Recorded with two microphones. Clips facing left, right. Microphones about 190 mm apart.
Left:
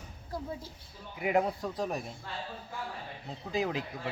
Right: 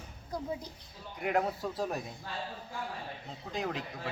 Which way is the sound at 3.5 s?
Centre (ahead or behind).